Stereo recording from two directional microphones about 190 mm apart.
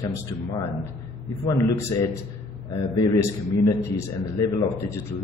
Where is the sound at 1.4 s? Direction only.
15° left (ahead or behind).